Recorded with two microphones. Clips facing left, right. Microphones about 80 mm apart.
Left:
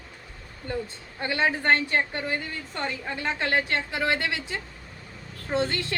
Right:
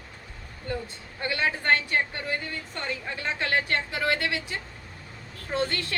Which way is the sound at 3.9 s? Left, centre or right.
Left.